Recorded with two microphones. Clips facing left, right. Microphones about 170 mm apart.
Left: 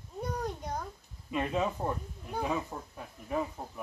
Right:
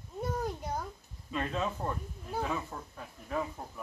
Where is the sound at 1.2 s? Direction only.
15° left (ahead or behind).